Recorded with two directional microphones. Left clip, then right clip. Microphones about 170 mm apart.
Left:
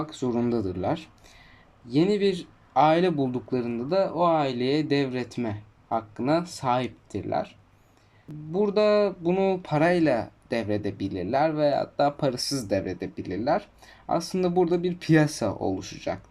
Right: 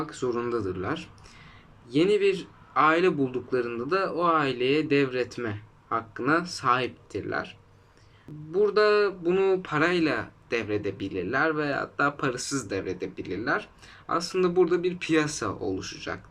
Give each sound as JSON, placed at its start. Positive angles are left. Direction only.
{"t": 0.0, "sound": "speech", "side_deg": 25}
{"t": 8.5, "sound": "speech", "side_deg": 20}